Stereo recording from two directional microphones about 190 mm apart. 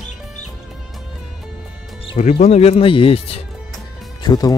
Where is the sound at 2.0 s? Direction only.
35° left (ahead or behind).